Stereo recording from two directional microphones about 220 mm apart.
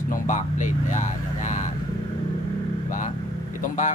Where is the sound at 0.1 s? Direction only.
35° left (ahead or behind).